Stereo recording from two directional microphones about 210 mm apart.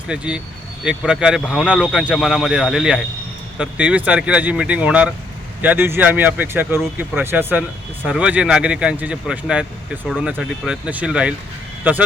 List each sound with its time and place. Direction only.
0.1 s speech: 5° right (ahead or behind)